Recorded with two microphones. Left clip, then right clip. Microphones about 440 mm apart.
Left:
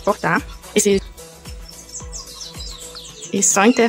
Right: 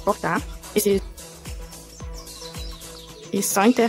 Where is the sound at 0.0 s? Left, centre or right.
Right.